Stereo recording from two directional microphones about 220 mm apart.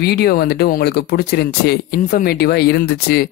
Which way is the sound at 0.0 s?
45° left (ahead or behind).